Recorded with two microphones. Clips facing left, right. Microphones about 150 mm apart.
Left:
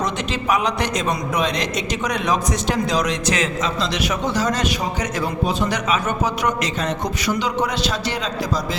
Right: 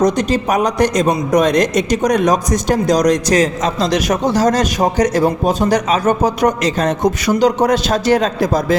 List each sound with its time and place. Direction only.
0.0 s a man's voice: 40° right (ahead or behind)